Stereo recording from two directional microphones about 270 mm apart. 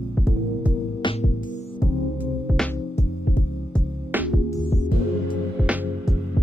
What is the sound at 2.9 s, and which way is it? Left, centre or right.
Music, left.